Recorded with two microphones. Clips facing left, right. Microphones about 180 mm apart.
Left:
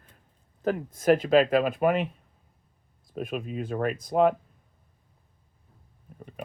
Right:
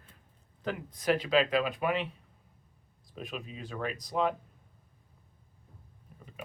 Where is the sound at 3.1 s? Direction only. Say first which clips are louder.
Left 9 dB; 50° left (ahead or behind).